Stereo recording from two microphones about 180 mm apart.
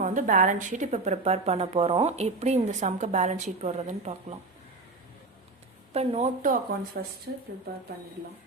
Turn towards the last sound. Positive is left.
turn(degrees=-65)  # may be behind; listen again after turning